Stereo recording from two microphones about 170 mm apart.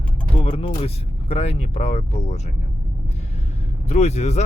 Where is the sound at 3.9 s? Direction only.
40° left (ahead or behind).